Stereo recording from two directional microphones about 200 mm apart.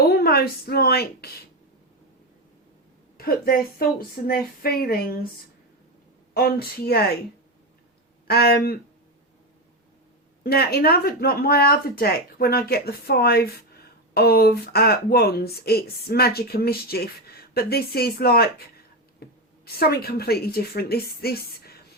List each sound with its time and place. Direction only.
0.1 s a woman's voice: 50° left (ahead or behind)
3.2 s speech: 50° left (ahead or behind)
6.3 s speech: 50° left (ahead or behind)
8.3 s speech: 50° left (ahead or behind)
10.4 s speech: 50° left (ahead or behind)